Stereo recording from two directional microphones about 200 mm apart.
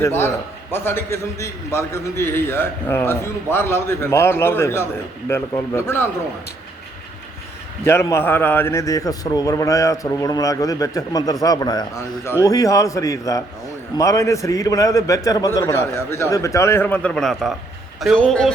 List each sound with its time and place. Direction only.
0.0 s a man's voice: 10° left (ahead or behind)
7.9 s a man's voice: 15° left (ahead or behind)